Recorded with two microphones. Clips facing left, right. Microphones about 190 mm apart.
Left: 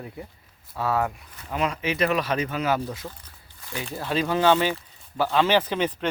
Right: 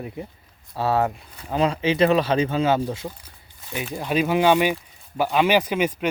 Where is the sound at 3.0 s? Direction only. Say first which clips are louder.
Right 4 dB; 15° right (ahead or behind).